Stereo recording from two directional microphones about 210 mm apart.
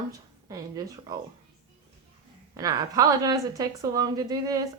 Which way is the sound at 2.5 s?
15° right (ahead or behind).